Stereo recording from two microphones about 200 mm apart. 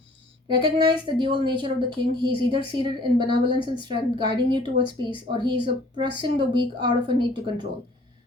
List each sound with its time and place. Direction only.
0.4 s a woman's voice: 25° right (ahead or behind)